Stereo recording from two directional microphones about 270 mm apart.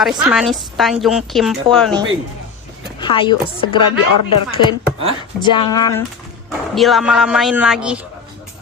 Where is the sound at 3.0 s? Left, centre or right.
Centre.